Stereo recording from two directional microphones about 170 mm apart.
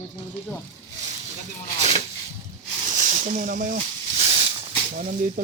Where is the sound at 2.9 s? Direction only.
45° right (ahead or behind).